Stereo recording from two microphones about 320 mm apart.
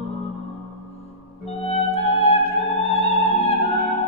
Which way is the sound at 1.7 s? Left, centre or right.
Centre.